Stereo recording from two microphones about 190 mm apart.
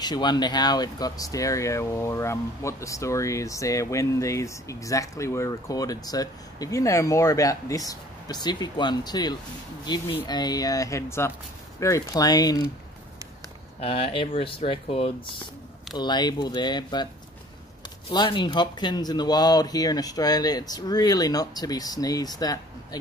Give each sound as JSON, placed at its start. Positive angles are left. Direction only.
{"t": 0.0, "sound": "speech", "side_deg": 20}
{"t": 13.7, "sound": "speech", "side_deg": 30}
{"t": 18.1, "sound": "speech", "side_deg": 25}